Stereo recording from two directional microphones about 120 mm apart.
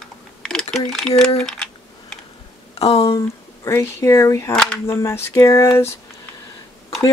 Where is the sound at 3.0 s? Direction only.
25° left (ahead or behind).